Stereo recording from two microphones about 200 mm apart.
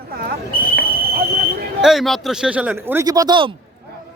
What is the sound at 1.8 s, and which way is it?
A man's voice, centre (ahead or behind).